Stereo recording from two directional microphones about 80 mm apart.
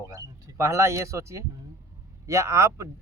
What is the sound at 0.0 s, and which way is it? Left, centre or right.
Speech, right.